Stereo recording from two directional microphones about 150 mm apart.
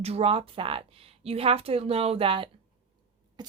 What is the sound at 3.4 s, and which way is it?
Rodents, 30° right (ahead or behind).